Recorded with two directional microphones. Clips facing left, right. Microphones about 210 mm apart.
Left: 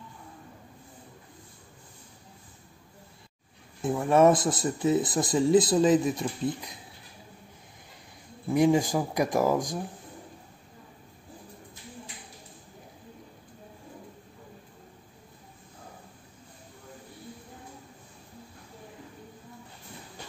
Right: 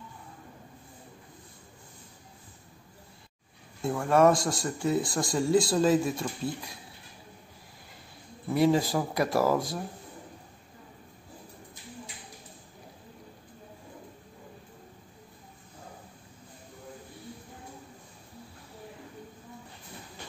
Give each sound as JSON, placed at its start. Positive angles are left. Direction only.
{"t": 3.8, "sound": "speech", "side_deg": 20}
{"t": 8.5, "sound": "speech", "side_deg": 15}